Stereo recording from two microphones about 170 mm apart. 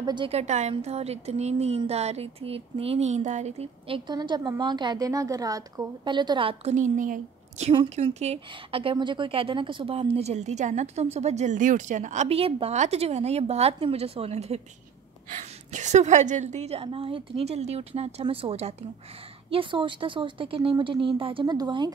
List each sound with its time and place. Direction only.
0.0 s a woman's voice: 25° right (ahead or behind)